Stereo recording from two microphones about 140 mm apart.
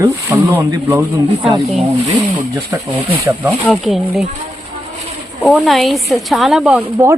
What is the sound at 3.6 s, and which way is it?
Speech, centre (ahead or behind).